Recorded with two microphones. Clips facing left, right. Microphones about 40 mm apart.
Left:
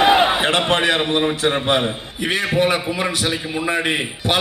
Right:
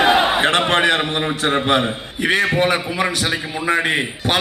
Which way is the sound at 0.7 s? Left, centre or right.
Right.